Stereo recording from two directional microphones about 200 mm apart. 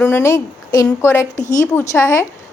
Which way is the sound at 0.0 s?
15° left (ahead or behind).